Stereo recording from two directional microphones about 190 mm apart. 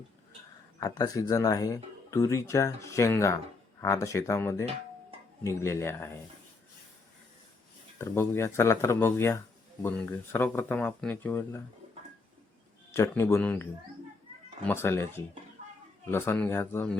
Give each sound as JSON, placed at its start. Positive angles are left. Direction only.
{"t": 0.8, "sound": "speech", "side_deg": 20}
{"t": 7.9, "sound": "speech", "side_deg": 15}
{"t": 12.9, "sound": "speech", "side_deg": 15}